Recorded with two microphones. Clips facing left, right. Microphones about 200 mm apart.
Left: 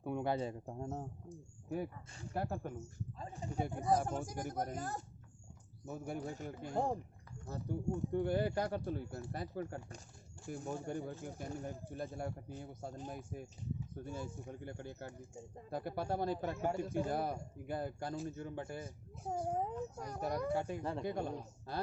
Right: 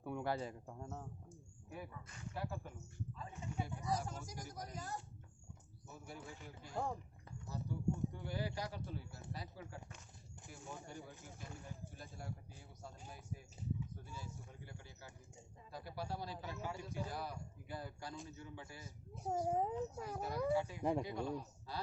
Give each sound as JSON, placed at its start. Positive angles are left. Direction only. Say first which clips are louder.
{"t": 0.0, "sound": "speech", "louder": "left 4 dB", "side_deg": 20}
{"t": 0.6, "sound": "a man's voice", "louder": "left 7 dB", "side_deg": 35}
{"t": 3.2, "sound": "a man's voice", "louder": "left 6 dB", "side_deg": 35}
{"t": 3.6, "sound": "speech", "louder": "left 7 dB", "side_deg": 55}
{"t": 6.7, "sound": "a man's voice", "louder": "left 6 dB", "side_deg": 40}
{"t": 7.4, "sound": "speech", "louder": "left 2 dB", "side_deg": 55}
{"t": 10.8, "sound": "speech", "louder": "left 11 dB", "side_deg": 55}
{"t": 19.2, "sound": "a child's voice", "louder": "even", "side_deg": 0}
{"t": 20.5, "sound": "speech", "louder": "right 1 dB", "side_deg": 55}